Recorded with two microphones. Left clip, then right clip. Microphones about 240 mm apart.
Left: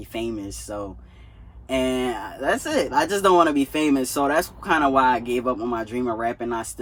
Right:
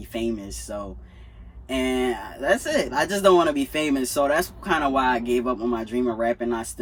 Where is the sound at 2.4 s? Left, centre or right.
Centre.